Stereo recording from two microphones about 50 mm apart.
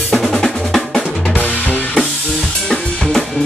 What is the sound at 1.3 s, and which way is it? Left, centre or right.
Drum kit, left.